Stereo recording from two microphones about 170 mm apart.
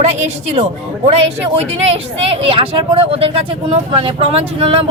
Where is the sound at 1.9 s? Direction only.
35° right (ahead or behind).